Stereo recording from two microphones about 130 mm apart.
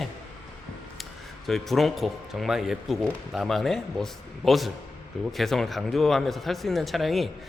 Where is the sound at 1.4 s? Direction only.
Centre (ahead or behind).